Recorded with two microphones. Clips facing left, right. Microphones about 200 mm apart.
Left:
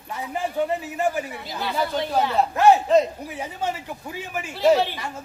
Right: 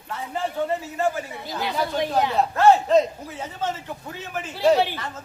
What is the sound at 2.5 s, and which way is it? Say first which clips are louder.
Speech: even; 15° left (ahead or behind).